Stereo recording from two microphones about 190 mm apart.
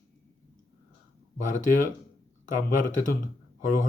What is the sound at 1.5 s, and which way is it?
Speech, 40° left (ahead or behind).